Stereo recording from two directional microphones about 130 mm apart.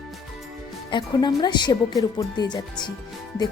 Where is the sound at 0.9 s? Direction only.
30° left (ahead or behind).